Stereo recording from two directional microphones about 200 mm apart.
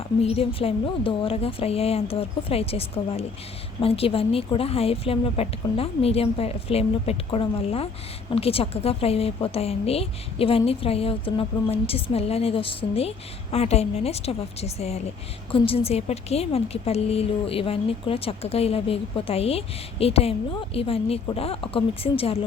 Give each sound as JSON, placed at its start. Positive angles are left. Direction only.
{"t": 0.2, "sound": "a woman's voice", "side_deg": 30}